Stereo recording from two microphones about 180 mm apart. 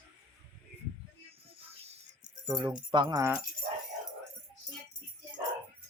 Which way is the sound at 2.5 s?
25° right (ahead or behind).